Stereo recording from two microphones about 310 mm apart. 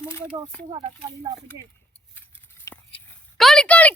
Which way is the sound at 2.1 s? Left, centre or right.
Centre.